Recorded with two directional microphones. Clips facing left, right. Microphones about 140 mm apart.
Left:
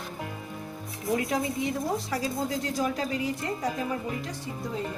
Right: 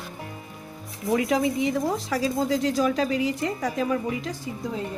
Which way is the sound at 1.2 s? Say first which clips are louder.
Right 7 dB; 90° right.